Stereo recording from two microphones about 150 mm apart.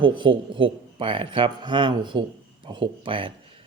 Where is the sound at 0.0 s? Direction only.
35° right (ahead or behind).